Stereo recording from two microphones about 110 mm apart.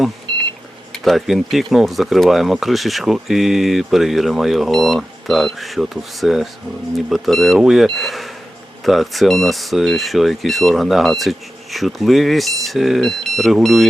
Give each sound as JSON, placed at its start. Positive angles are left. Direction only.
{"t": 0.3, "sound": "beep", "side_deg": -50}
{"t": 0.9, "sound": "speech", "side_deg": 0}